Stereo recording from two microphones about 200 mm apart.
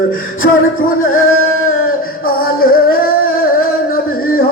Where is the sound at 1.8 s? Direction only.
50° left (ahead or behind).